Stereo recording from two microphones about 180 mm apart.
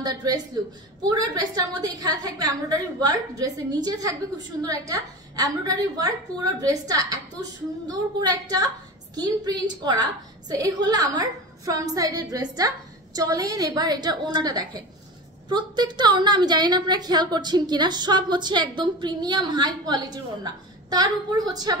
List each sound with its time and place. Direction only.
0.0 s a woman's voice: 20° right (ahead or behind)